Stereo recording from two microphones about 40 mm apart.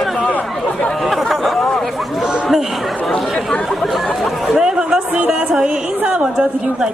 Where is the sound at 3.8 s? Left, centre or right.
Centre.